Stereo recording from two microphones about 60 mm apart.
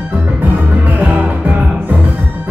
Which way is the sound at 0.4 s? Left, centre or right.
Right.